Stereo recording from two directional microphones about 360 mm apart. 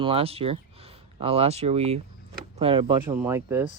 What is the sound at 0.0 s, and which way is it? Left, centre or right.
Speech, centre.